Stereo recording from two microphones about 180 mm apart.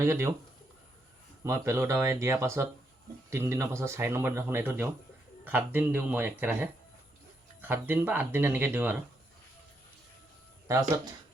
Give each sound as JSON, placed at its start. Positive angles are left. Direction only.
{"t": 0.0, "sound": "speech", "side_deg": -15}
{"t": 1.5, "sound": "speech", "side_deg": -15}
{"t": 10.7, "sound": "speech", "side_deg": -20}